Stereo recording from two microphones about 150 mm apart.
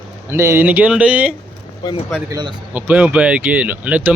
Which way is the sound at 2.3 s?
30° right (ahead or behind).